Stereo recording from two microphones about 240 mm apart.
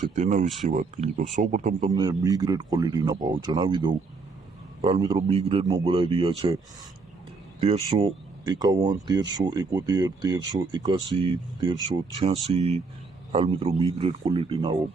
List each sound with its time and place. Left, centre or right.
0.0 s speech: right
1.9 s speech: centre
7.9 s speech: centre